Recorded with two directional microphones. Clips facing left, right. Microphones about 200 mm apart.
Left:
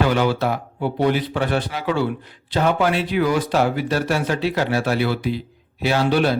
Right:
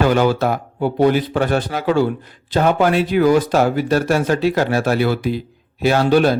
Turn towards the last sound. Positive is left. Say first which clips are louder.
# right 4 dB
turn(degrees=-45)  # may be behind; listen again after turning